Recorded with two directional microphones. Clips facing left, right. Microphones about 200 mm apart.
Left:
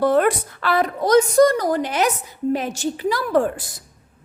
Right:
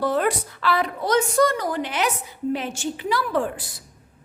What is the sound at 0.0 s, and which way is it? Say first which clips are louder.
A woman's voice: left 5 dB; 55° left (ahead or behind).